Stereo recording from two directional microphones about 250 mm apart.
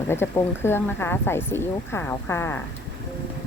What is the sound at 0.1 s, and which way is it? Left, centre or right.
Speech, centre.